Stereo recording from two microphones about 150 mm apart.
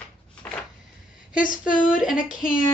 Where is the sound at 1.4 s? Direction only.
65° left (ahead or behind).